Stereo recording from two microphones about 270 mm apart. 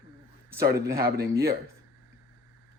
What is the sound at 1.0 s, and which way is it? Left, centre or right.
Speech, right.